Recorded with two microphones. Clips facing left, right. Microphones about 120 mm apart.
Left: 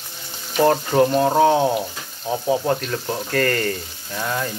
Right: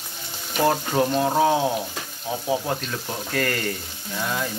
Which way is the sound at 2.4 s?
15° left (ahead or behind).